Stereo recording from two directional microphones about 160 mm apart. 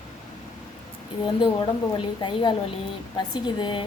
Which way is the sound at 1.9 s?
30° left (ahead or behind).